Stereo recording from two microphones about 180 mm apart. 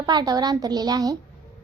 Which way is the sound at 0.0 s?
20° right (ahead or behind).